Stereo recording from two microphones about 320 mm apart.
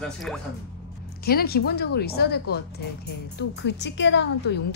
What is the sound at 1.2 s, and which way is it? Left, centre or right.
A woman's voice, left.